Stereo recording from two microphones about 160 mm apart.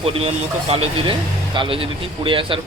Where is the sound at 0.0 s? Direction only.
35° right (ahead or behind).